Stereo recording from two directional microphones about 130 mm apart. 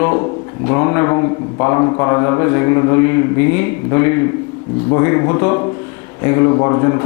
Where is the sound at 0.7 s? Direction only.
25° left (ahead or behind).